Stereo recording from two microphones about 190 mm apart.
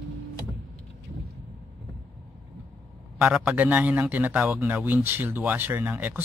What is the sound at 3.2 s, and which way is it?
A man's voice, 5° right (ahead or behind).